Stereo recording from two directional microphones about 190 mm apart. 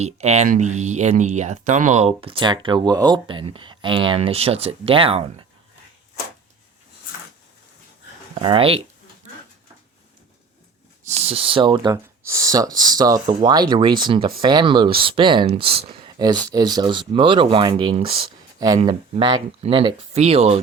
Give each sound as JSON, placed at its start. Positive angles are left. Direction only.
{"t": 0.0, "sound": "speech", "side_deg": -35}
{"t": 8.4, "sound": "speech", "side_deg": -25}
{"t": 11.1, "sound": "speech", "side_deg": -30}